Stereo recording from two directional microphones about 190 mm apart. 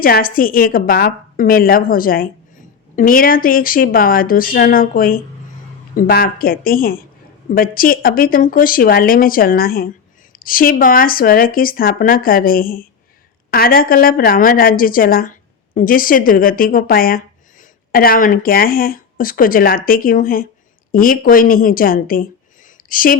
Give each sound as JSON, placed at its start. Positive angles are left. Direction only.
{"t": 0.0, "sound": "a woman's voice", "side_deg": 50}